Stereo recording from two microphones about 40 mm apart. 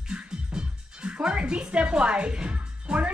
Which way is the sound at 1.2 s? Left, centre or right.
Right.